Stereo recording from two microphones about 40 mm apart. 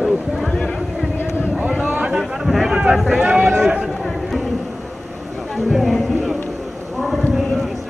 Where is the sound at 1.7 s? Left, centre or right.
Right.